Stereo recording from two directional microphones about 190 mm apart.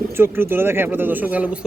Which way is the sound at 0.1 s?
10° right (ahead or behind).